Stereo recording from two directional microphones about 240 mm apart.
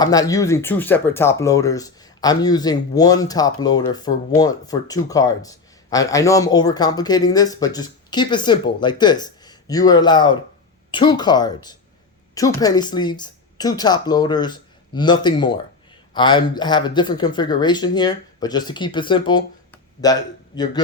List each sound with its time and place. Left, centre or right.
0.0 s a man's voice: centre